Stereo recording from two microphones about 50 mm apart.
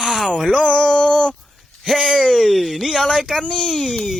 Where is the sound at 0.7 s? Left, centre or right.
Centre.